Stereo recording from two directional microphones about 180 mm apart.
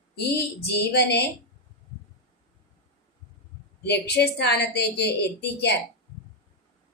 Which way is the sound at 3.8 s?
65° left (ahead or behind).